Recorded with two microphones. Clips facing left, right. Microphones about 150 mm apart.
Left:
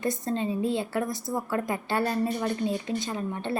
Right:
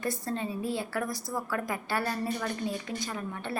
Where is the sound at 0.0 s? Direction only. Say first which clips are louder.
Left 4 dB; 20° left (ahead or behind).